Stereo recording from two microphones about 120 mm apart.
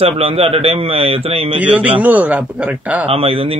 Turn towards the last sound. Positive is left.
turn(degrees=-55)  # may be behind; listen again after turning